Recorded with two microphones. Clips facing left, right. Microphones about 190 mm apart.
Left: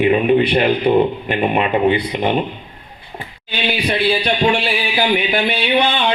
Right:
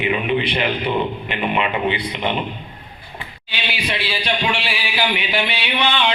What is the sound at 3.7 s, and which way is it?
Speech, 40° left (ahead or behind).